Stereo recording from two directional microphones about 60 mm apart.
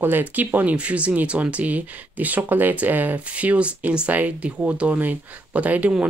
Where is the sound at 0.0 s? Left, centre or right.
Right.